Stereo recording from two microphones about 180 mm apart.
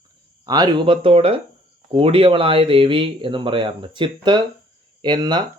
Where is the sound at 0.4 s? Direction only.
20° right (ahead or behind).